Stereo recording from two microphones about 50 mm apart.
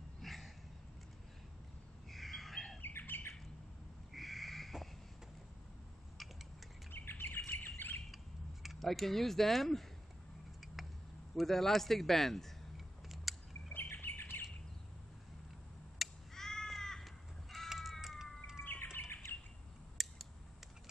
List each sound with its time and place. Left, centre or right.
0.2 s a sound: centre
2.0 s squawk: centre
2.8 s squawk: left
4.1 s a sound: centre
6.9 s bird: left
8.6 s speech: centre
11.3 s a sound: centre
13.7 s squawk: left
16.0 s crow: centre
16.3 s crow: centre
18.6 s bird: left
20.0 s scissors: centre